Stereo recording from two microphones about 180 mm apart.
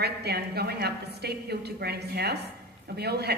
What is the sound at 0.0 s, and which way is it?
A woman's voice, 65° right (ahead or behind).